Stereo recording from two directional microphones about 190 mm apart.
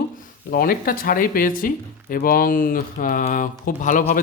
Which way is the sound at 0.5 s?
50° left (ahead or behind).